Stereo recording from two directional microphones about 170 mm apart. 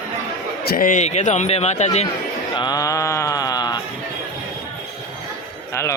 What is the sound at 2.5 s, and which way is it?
Mantra, 25° left (ahead or behind).